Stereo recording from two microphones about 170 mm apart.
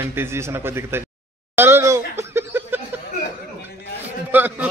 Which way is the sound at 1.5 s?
15° right (ahead or behind).